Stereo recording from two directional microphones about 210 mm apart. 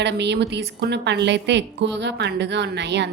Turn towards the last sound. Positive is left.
turn(degrees=-55)  # may be behind; listen again after turning